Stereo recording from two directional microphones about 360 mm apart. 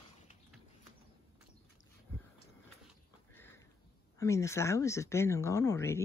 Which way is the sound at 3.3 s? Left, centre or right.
Centre.